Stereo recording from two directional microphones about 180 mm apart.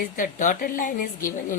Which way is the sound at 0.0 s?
45° left (ahead or behind).